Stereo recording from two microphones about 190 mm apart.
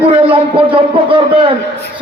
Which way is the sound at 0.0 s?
30° right (ahead or behind).